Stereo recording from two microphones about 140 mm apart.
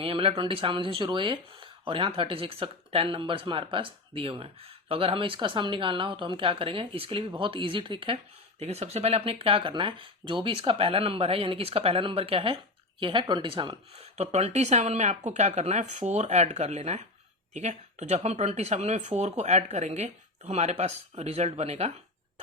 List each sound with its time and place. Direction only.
0.0 s speech: 40° right (ahead or behind)